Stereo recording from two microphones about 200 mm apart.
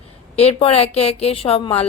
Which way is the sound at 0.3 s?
30° left (ahead or behind).